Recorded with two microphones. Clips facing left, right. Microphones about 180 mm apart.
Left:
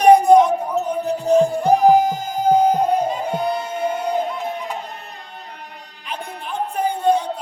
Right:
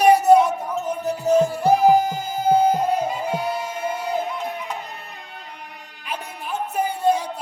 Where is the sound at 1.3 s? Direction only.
5° right (ahead or behind).